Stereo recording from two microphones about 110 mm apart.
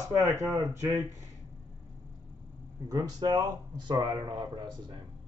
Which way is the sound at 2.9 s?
40° right (ahead or behind).